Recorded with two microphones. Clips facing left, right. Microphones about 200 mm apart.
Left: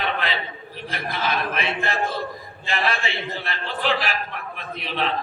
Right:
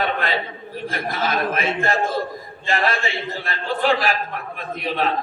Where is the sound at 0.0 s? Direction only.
45° right (ahead or behind).